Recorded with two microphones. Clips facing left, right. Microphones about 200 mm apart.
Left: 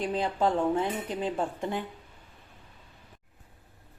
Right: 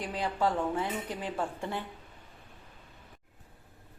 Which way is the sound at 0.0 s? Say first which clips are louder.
Left 3 dB; 25° left (ahead or behind).